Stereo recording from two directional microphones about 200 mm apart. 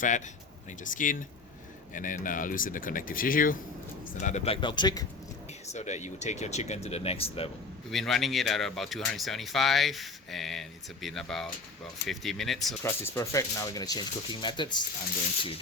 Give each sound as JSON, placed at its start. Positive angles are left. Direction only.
{"t": 0.9, "sound": "speech", "side_deg": 40}
{"t": 5.6, "sound": "speech", "side_deg": 35}
{"t": 7.9, "sound": "speech", "side_deg": 0}
{"t": 12.8, "sound": "speech", "side_deg": 15}